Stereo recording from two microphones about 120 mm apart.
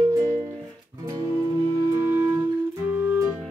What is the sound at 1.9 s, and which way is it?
Music, 20° right (ahead or behind).